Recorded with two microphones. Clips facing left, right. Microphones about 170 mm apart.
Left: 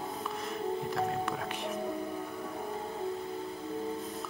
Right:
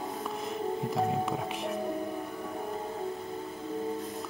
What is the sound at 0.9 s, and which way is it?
Music, centre (ahead or behind).